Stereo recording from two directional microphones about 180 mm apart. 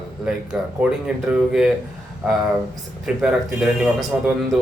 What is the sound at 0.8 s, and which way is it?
Speech, 5° right (ahead or behind).